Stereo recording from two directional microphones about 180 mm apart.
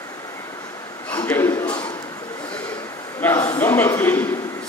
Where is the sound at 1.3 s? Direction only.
10° left (ahead or behind).